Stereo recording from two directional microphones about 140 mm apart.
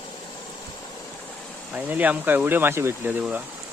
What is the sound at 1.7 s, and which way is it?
Speech, 10° right (ahead or behind).